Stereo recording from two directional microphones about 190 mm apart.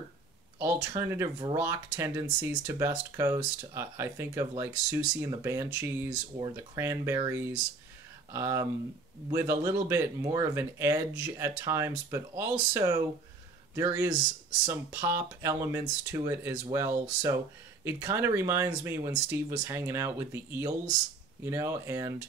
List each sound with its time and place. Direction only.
0.6 s speech: 10° right (ahead or behind)